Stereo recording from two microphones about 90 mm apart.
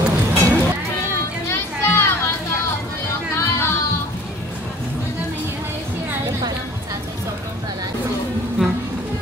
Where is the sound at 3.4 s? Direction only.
25° left (ahead or behind).